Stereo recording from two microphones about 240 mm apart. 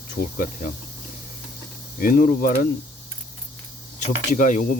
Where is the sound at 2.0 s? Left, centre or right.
Left.